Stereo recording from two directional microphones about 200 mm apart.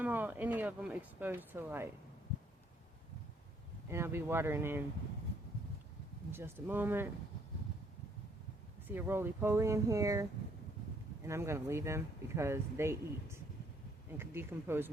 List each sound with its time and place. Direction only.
0.0 s speech: 10° right (ahead or behind)
3.8 s speech: 15° right (ahead or behind)
6.3 s speech: 10° right (ahead or behind)
8.9 s speech: 10° right (ahead or behind)